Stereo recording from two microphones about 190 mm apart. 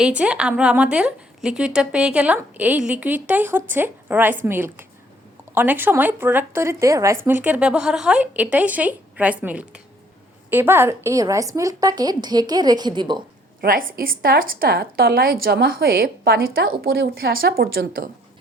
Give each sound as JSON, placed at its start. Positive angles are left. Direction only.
{"t": 0.0, "sound": "a woman's voice", "side_deg": -5}
{"t": 13.6, "sound": "a woman's voice", "side_deg": -50}